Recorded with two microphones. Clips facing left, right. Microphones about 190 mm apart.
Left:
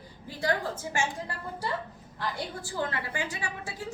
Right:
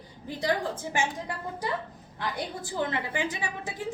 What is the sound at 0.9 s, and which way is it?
Speech, 15° right (ahead or behind).